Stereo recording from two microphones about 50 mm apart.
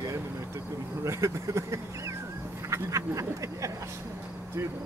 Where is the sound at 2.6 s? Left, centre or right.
Right.